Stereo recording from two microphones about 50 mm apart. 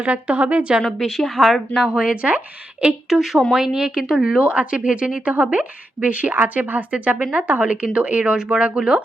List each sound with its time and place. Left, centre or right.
0.0 s speech: right
0.9 s a woman's voice: centre
1.8 s speech: right
2.8 s speech: centre
4.4 s speech: right
7.2 s speech: centre